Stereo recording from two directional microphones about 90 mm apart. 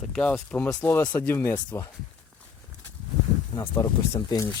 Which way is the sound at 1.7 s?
30° left (ahead or behind).